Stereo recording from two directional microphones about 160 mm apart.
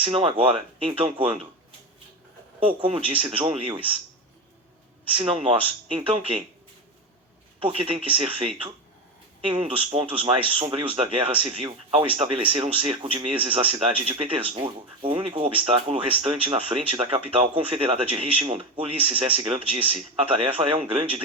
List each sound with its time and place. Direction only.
0.0 s speech: 35° right (ahead or behind)
2.6 s speech: 35° right (ahead or behind)
5.1 s speech: 35° right (ahead or behind)
7.6 s speech: 35° right (ahead or behind)